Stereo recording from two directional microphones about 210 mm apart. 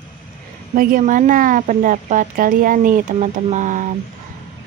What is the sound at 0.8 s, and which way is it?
Speech, 45° right (ahead or behind).